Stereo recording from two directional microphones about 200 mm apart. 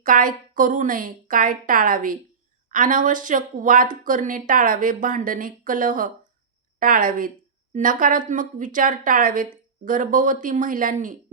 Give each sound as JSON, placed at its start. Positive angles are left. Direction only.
{"t": 0.0, "sound": "a woman's voice", "side_deg": -45}